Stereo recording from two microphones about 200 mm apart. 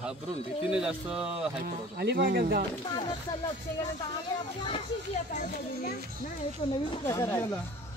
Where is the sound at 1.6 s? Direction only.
60° right (ahead or behind).